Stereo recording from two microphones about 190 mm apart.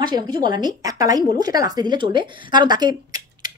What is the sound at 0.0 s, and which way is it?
A woman's voice, 25° right (ahead or behind).